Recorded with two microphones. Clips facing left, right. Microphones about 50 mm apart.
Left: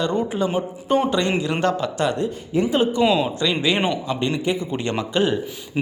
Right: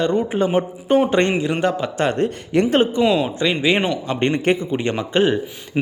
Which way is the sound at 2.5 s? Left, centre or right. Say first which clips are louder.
Right 4 dB; right.